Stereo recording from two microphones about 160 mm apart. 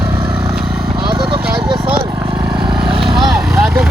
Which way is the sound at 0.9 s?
30° right (ahead or behind).